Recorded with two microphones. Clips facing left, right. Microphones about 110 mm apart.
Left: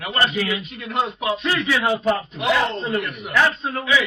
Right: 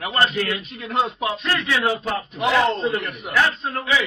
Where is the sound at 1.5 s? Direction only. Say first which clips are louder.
Even; 5° left (ahead or behind).